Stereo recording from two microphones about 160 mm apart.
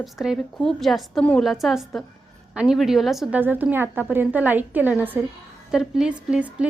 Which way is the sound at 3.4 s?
10° right (ahead or behind).